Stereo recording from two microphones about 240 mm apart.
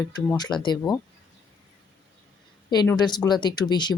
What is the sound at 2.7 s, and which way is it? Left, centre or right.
Speech, centre.